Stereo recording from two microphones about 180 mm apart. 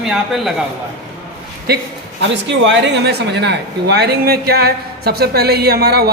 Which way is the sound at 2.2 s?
80° right.